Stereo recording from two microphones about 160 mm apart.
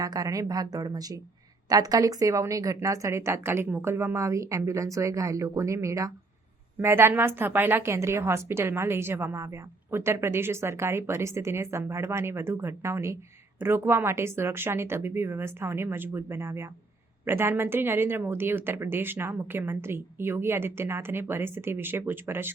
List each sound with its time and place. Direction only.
0.0 s a woman's voice: 25° right (ahead or behind)